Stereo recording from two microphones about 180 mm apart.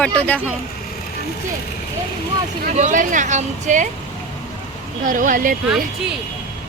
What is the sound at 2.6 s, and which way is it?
Speech, 45° right (ahead or behind).